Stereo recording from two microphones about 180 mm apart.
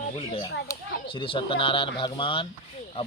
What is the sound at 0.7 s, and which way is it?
Speech, 30° left (ahead or behind).